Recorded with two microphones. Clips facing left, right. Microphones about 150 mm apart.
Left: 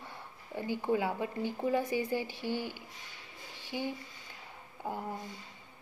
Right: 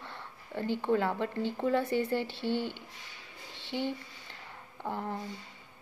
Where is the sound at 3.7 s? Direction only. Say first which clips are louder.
Right 3 dB; 10° left (ahead or behind).